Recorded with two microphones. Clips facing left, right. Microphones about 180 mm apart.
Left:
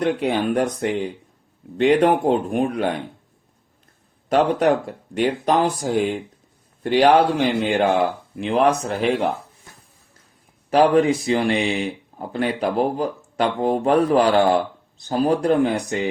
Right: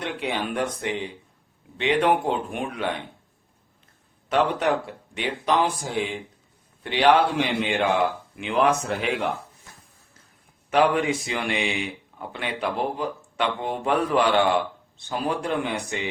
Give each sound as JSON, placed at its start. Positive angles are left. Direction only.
{"t": 0.0, "sound": "a man's voice", "side_deg": 40}
{"t": 4.3, "sound": "a man's voice", "side_deg": 40}
{"t": 10.7, "sound": "a man's voice", "side_deg": 35}